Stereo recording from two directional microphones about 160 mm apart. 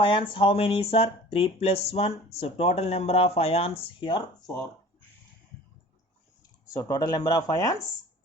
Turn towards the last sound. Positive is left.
turn(degrees=25)  # may be behind; listen again after turning